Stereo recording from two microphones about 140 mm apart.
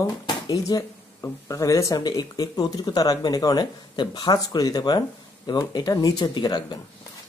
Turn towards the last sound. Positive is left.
turn(degrees=30)  # may be behind; listen again after turning